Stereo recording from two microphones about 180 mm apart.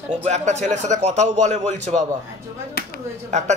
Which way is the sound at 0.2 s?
40° right (ahead or behind).